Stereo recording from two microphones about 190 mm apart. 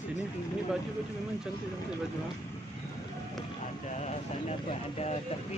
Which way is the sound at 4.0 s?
35° left (ahead or behind).